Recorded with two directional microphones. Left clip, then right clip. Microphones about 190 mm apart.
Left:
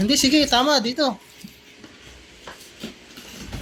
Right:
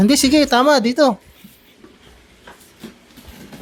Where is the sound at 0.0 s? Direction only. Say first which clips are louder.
Right 4 dB; 65° right (ahead or behind).